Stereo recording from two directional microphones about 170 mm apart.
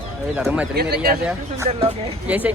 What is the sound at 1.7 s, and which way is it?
Speech, 35° right (ahead or behind).